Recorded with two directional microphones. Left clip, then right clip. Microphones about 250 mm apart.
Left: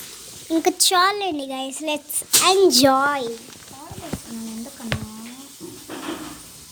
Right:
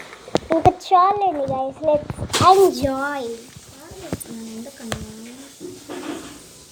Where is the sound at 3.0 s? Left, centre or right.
Centre.